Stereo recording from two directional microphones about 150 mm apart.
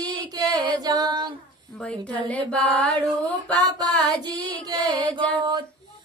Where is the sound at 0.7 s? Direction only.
25° right (ahead or behind).